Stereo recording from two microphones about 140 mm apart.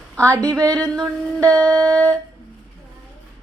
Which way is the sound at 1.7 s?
30° right (ahead or behind).